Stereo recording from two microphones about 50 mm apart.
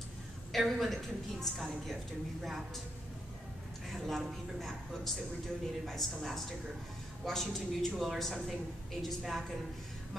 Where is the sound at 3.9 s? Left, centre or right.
Centre.